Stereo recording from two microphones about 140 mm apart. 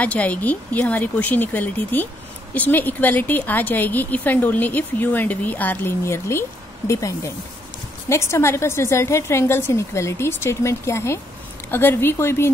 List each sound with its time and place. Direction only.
0.0 s a woman's voice: 10° left (ahead or behind)